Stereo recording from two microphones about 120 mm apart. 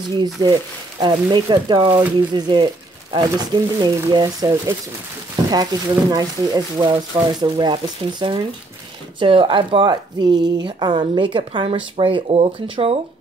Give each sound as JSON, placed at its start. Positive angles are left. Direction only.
{"t": 0.2, "sound": "a woman's voice", "side_deg": -35}